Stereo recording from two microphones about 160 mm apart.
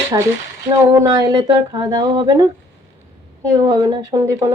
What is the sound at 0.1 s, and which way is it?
Speech, 25° right (ahead or behind).